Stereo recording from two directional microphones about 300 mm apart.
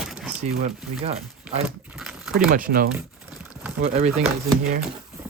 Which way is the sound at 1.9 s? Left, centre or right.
Centre.